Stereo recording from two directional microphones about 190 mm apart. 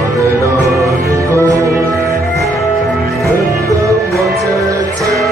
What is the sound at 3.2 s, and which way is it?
Music, 15° right (ahead or behind).